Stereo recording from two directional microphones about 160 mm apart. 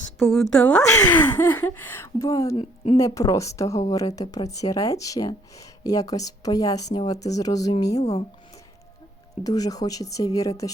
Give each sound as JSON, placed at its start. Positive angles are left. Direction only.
{"t": 0.3, "sound": "a woman's voice", "side_deg": 0}
{"t": 0.8, "sound": "speech", "side_deg": 20}
{"t": 9.4, "sound": "speech", "side_deg": 25}